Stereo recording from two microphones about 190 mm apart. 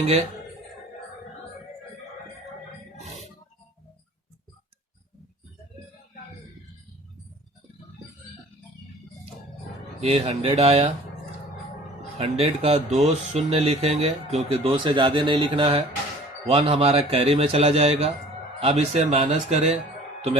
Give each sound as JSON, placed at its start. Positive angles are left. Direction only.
{"t": 10.0, "sound": "speech", "side_deg": -30}
{"t": 12.1, "sound": "speech", "side_deg": -35}